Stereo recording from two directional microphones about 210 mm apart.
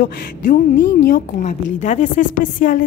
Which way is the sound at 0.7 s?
55° left (ahead or behind).